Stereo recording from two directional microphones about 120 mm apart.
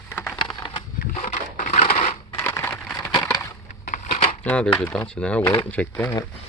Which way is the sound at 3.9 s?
75° left (ahead or behind).